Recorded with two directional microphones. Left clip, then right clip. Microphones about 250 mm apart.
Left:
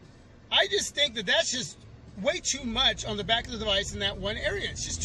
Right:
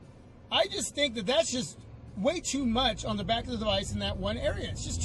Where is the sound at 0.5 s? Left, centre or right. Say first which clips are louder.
Left 3 dB; centre.